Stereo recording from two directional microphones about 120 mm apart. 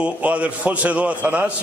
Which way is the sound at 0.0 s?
10° right (ahead or behind).